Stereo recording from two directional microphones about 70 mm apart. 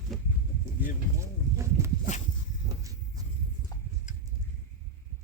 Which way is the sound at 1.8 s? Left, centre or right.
Right.